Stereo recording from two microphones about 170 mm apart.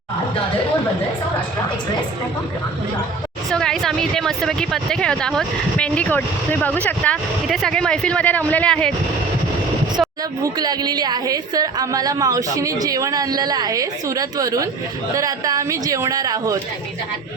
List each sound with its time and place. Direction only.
3.5 s speech: 5° left (ahead or behind)
10.4 s a woman's voice: 25° right (ahead or behind)